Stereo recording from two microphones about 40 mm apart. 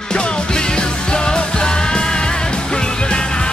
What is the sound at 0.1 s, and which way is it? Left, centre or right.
Music, left.